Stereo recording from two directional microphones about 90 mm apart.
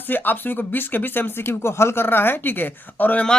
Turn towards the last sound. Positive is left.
turn(degrees=15)  # may be behind; listen again after turning